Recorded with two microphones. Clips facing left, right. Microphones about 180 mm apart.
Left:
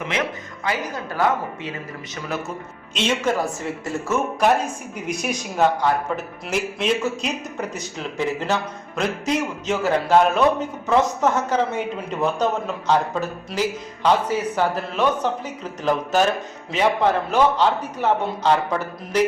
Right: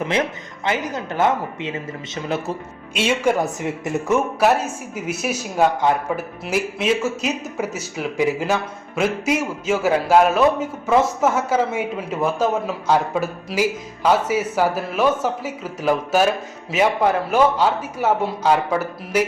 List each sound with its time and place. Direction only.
0.1 s speech: 25° right (ahead or behind)
2.9 s a man's voice: 10° right (ahead or behind)
4.4 s a man's voice: 5° right (ahead or behind)